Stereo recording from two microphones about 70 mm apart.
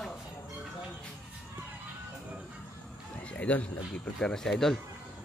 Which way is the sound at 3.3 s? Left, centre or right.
Centre.